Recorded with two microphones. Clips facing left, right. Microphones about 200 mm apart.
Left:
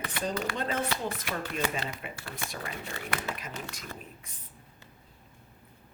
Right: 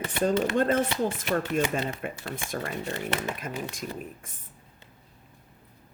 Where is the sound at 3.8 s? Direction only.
50° right (ahead or behind).